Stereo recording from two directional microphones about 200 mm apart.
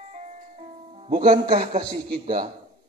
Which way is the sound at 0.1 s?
35° right (ahead or behind).